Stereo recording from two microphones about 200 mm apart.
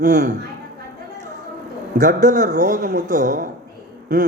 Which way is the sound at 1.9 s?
40° right (ahead or behind).